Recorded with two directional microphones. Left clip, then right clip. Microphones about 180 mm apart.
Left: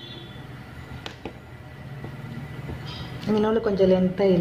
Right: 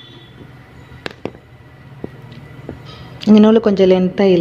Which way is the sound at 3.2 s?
55° right (ahead or behind).